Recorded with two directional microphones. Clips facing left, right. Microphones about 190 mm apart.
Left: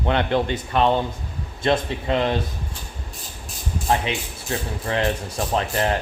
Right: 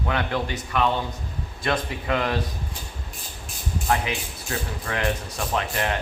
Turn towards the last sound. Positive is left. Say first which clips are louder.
# left 4 dB
turn(degrees=35)  # may be behind; listen again after turning